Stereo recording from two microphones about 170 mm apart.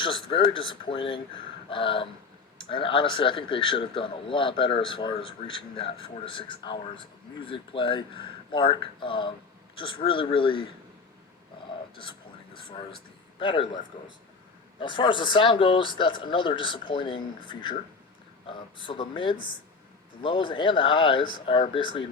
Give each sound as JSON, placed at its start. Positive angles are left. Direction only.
{"t": 0.0, "sound": "a man's voice", "side_deg": 30}
{"t": 12.5, "sound": "a man's voice", "side_deg": 30}
{"t": 14.8, "sound": "a man's voice", "side_deg": 30}